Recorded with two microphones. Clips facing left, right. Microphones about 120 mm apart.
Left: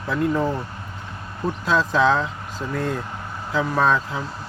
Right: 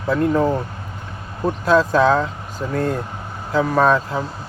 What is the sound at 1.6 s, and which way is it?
Speech, 50° right (ahead or behind).